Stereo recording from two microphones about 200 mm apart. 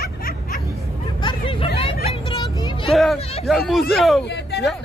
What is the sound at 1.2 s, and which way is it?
Music, 25° left (ahead or behind).